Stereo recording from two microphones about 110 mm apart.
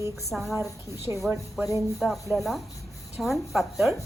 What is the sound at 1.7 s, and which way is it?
Speech, 30° left (ahead or behind).